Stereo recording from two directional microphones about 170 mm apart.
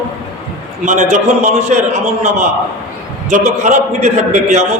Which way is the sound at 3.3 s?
45° right (ahead or behind).